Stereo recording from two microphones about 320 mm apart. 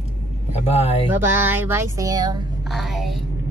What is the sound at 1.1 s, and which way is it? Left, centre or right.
Speech, centre.